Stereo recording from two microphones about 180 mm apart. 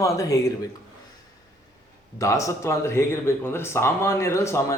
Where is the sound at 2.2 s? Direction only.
15° left (ahead or behind).